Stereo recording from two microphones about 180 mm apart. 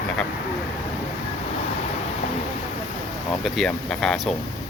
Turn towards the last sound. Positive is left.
turn(degrees=0)  # may be behind; listen again after turning